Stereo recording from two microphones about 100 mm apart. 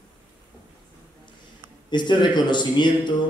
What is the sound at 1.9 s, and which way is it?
Speech, 50° left (ahead or behind).